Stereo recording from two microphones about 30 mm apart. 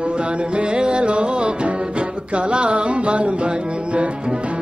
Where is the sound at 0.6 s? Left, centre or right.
Right.